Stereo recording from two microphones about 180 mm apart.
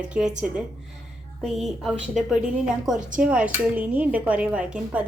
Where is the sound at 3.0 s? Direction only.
45° right (ahead or behind).